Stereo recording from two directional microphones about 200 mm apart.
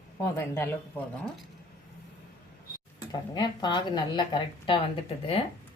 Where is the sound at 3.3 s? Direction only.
20° left (ahead or behind).